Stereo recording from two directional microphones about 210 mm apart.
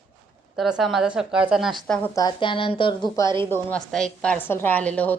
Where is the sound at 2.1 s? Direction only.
20° left (ahead or behind).